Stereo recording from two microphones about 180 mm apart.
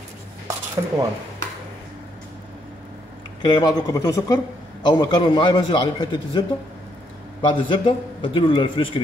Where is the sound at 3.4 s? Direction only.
25° left (ahead or behind).